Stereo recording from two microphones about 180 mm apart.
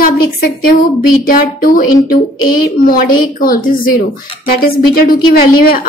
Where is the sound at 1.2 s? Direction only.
50° left (ahead or behind).